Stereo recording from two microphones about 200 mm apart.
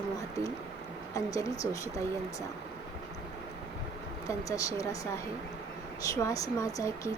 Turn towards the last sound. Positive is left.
turn(degrees=15)  # may be behind; listen again after turning